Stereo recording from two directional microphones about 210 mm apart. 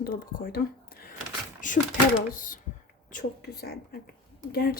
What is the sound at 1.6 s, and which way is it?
A woman's voice, 40° left (ahead or behind).